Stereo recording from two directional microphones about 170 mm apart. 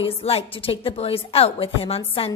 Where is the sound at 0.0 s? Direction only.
35° left (ahead or behind).